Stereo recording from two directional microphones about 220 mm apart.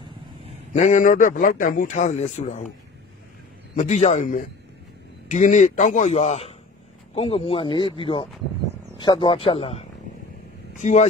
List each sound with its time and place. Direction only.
0.7 s a man's voice: 35° left (ahead or behind)
3.7 s a man's voice: 30° left (ahead or behind)